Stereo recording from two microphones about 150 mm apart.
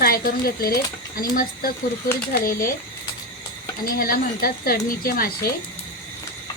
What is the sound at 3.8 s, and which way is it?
Speech, 75° left (ahead or behind).